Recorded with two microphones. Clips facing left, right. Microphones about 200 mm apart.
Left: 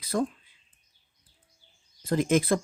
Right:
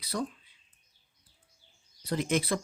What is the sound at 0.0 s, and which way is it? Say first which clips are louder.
Speech: left 6 dB; 50° left (ahead or behind).